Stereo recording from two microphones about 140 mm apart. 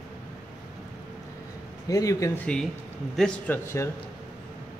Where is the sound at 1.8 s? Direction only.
25° left (ahead or behind).